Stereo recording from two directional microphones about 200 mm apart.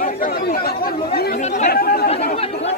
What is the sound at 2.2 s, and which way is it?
Chatter, 30° left (ahead or behind).